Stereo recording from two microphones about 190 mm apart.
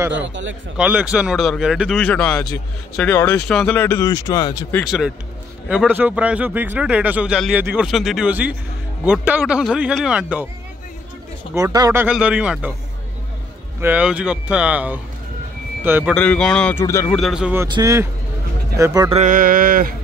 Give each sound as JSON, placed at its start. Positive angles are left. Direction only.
{"t": 0.2, "sound": "a man's voice", "side_deg": -80}
{"t": 0.7, "sound": "speech", "side_deg": -5}
{"t": 4.8, "sound": "a man's voice", "side_deg": -5}
{"t": 11.5, "sound": "a man's voice", "side_deg": -20}
{"t": 13.7, "sound": "a man's voice", "side_deg": -10}
{"t": 16.1, "sound": "speech", "side_deg": 5}
{"t": 17.2, "sound": "speech", "side_deg": -5}
{"t": 17.6, "sound": "speech", "side_deg": -20}
{"t": 19.0, "sound": "a sound", "side_deg": -40}